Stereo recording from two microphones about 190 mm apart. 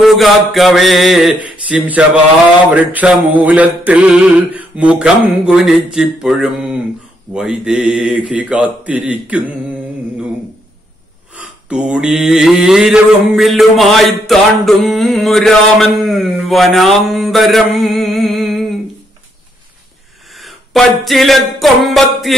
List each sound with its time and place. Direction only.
0.0 s mantra: centre (ahead or behind)
2.7 s speech: 10° right (ahead or behind)
3.3 s mantra: 10° right (ahead or behind)
8.3 s speech: 5° right (ahead or behind)
11.3 s mantra: 5° right (ahead or behind)
20.3 s music: centre (ahead or behind)